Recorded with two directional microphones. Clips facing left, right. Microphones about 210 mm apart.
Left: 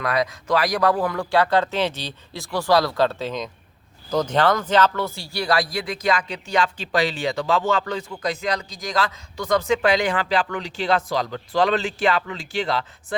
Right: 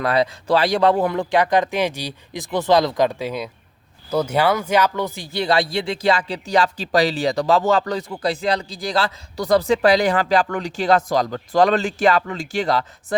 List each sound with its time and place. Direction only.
0.0 s speech: 30° right (ahead or behind)